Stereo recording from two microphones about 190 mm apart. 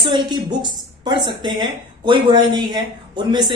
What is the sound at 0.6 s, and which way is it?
A woman's voice, 25° right (ahead or behind).